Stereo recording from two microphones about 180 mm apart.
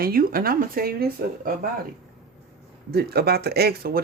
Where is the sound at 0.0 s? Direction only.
55° right (ahead or behind).